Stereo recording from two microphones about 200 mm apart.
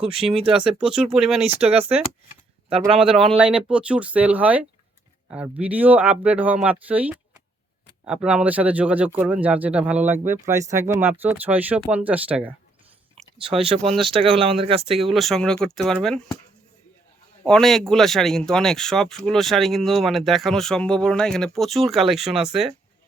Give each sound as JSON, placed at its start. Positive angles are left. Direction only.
{"t": 0.0, "sound": "speech", "side_deg": -30}
{"t": 0.5, "sound": "speech", "side_deg": -5}
{"t": 1.5, "sound": "speech", "side_deg": -30}
{"t": 3.2, "sound": "speech", "side_deg": -5}
{"t": 13.4, "sound": "speech", "side_deg": -25}
{"t": 15.0, "sound": "speech", "side_deg": 0}
{"t": 17.4, "sound": "speech", "side_deg": 5}